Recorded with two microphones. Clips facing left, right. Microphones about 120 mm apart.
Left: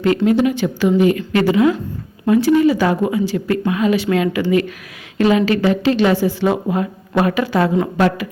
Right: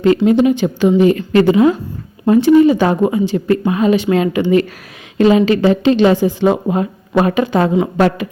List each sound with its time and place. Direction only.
0.3 s speech: 25° right (ahead or behind)